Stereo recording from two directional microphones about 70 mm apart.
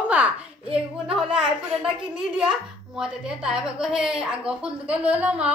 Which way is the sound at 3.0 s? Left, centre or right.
Centre.